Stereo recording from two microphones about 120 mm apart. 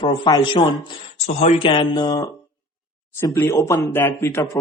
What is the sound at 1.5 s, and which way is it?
Speech, 45° left (ahead or behind).